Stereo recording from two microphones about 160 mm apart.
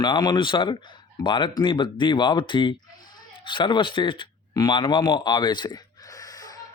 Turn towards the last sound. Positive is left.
turn(degrees=20)  # may be behind; listen again after turning